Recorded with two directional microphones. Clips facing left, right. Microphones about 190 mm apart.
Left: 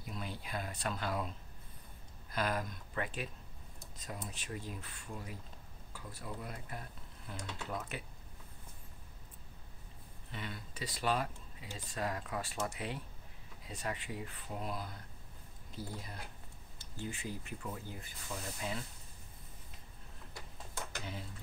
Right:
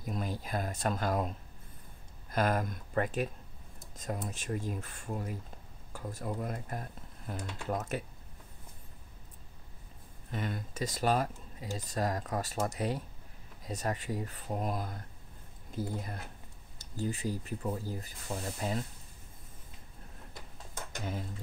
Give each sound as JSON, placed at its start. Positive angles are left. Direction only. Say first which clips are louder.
{"t": 0.0, "sound": "speech", "louder": "right 7 dB", "side_deg": -45}
{"t": 2.3, "sound": "speech", "louder": "right 6 dB", "side_deg": -45}
{"t": 10.3, "sound": "speech", "louder": "right 8 dB", "side_deg": -45}
{"t": 16.7, "sound": "speech", "louder": "right 8 dB", "side_deg": -40}
{"t": 21.0, "sound": "speech", "louder": "right 7 dB", "side_deg": -45}